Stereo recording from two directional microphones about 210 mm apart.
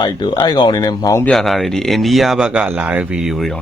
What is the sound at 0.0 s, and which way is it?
Speech, 20° left (ahead or behind).